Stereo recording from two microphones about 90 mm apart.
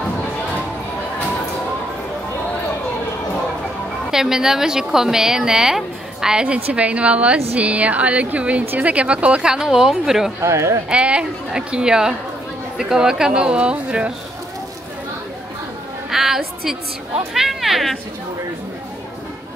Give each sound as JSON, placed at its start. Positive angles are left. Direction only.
{"t": 4.1, "sound": "speech", "side_deg": -5}
{"t": 10.4, "sound": "speech", "side_deg": -35}
{"t": 10.9, "sound": "speech", "side_deg": -10}
{"t": 16.1, "sound": "a woman's voice", "side_deg": -5}